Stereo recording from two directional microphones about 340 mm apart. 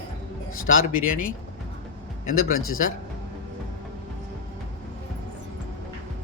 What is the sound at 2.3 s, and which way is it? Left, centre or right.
Speech, left.